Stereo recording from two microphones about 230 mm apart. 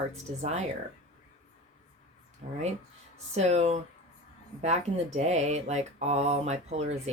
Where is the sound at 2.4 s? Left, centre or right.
Right.